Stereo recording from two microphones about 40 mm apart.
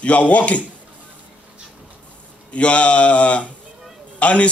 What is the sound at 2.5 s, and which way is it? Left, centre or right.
A man's voice, left.